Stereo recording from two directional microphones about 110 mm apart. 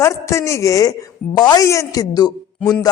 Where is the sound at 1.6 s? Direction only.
25° left (ahead or behind).